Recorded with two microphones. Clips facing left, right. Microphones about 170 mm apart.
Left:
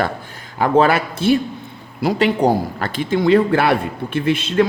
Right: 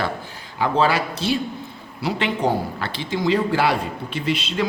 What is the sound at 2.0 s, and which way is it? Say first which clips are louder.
A man's voice: left 6 dB; 40° left (ahead or behind).